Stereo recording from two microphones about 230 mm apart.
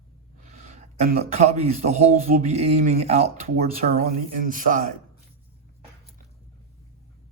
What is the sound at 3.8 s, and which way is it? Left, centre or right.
Speech, right.